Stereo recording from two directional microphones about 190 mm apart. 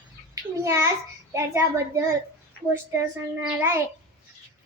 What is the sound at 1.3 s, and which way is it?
Speech, 15° right (ahead or behind).